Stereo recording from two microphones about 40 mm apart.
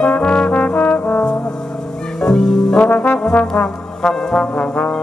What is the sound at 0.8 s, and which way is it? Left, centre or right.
Brass instrument, left.